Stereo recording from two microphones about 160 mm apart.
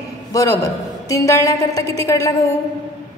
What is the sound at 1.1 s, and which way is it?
A woman's voice, 20° left (ahead or behind).